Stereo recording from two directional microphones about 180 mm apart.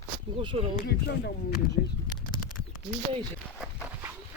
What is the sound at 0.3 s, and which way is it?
Speech, 30° right (ahead or behind).